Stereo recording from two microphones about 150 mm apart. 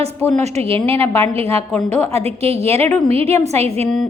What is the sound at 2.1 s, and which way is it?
A woman's voice, 45° right (ahead or behind).